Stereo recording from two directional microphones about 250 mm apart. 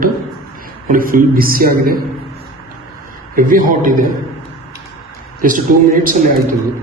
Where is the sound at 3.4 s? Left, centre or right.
Right.